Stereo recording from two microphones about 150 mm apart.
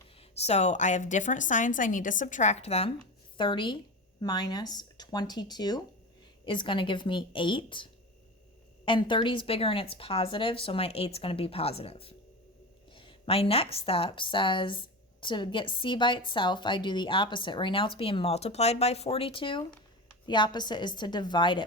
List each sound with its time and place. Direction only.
0.2 s a woman's voice: 45° left (ahead or behind)
3.3 s a woman's voice: 35° left (ahead or behind)